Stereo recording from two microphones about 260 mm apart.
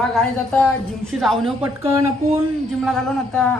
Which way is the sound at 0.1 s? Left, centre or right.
Centre.